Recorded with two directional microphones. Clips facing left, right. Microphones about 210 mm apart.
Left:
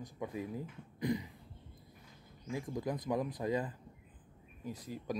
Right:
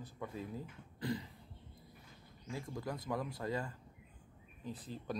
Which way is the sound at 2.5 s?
20° left (ahead or behind).